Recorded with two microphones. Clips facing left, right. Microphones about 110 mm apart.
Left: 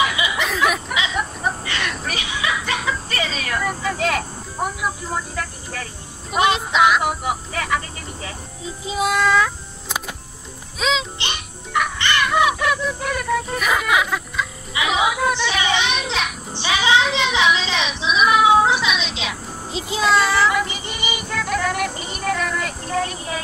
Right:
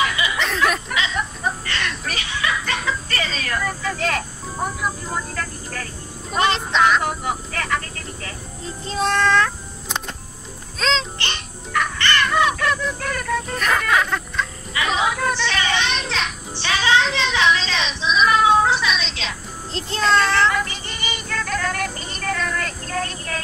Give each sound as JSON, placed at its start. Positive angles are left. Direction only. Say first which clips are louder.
{"t": 0.0, "sound": "a sound", "louder": "left 1 dB", "side_deg": 10}
{"t": 6.3, "sound": "vehicle", "louder": "left 2 dB", "side_deg": 10}
{"t": 10.8, "sound": "music", "louder": "even", "side_deg": 10}